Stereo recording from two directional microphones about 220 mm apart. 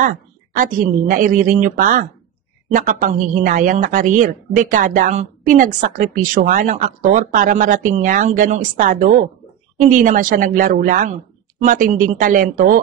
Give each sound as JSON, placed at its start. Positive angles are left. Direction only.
{"t": 0.0, "sound": "speech", "side_deg": -35}